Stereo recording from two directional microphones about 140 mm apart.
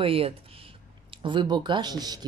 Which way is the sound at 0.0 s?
40° right (ahead or behind).